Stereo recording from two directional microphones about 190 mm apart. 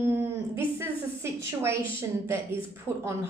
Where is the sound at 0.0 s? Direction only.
10° right (ahead or behind).